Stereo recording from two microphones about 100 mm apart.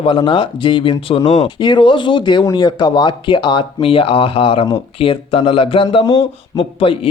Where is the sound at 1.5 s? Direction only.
50° left (ahead or behind).